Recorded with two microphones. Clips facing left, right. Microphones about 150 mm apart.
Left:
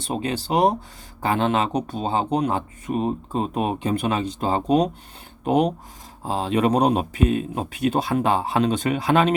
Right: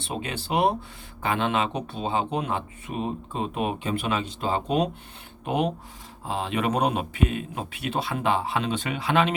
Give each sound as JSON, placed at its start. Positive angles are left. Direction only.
{"t": 0.0, "sound": "speech", "side_deg": 35}